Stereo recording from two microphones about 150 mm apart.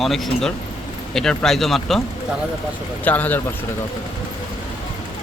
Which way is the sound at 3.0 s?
10° left (ahead or behind).